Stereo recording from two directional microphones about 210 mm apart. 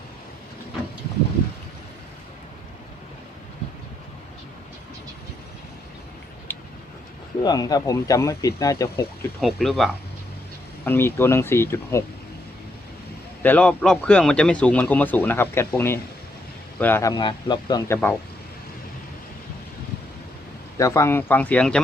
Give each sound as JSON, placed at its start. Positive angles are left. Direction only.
{"t": 6.5, "sound": "vehicle", "side_deg": 10}
{"t": 7.4, "sound": "a man's voice", "side_deg": 20}
{"t": 9.4, "sound": "speech", "side_deg": 0}
{"t": 10.8, "sound": "a man's voice", "side_deg": 10}
{"t": 13.4, "sound": "a man's voice", "side_deg": 5}
{"t": 20.7, "sound": "a man's voice", "side_deg": 15}